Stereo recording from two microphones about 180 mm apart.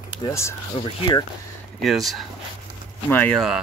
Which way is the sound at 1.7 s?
Centre (ahead or behind).